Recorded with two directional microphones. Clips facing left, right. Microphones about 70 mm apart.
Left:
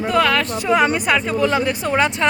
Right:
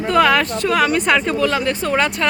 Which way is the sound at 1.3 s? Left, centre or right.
Left.